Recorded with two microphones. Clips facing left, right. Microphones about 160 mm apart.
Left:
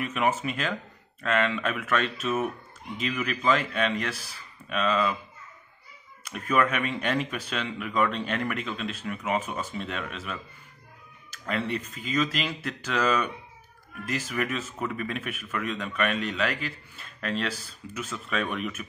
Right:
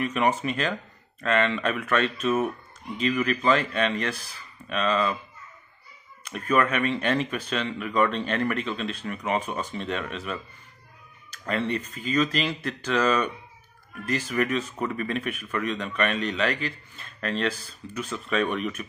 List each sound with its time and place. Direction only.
0.0 s a man's voice: 5° left (ahead or behind)
6.2 s a man's voice: 10° left (ahead or behind)
11.4 s a man's voice: 5° left (ahead or behind)